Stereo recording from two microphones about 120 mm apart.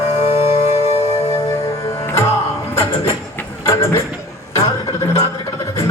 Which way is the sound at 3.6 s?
25° left (ahead or behind).